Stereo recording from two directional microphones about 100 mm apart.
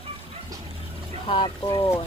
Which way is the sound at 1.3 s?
50° left (ahead or behind).